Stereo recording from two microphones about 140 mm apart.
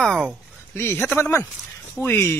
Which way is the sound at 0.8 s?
15° left (ahead or behind).